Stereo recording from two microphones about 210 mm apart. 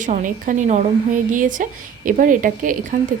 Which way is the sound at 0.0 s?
40° right (ahead or behind).